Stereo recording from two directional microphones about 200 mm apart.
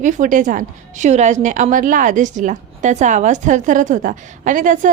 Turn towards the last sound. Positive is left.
turn(degrees=-40)  # may be behind; listen again after turning